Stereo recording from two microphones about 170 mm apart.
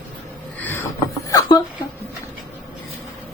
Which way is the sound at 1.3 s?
20° left (ahead or behind).